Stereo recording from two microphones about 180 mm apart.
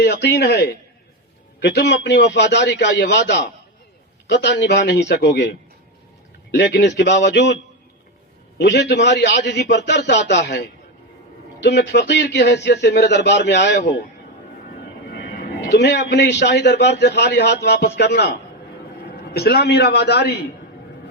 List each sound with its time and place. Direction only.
0.0 s a man's voice: 65° left (ahead or behind)
15.1 s a man's voice: 70° left (ahead or behind)